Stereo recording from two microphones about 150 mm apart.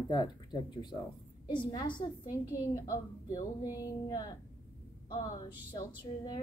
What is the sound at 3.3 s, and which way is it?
Speech, 25° left (ahead or behind).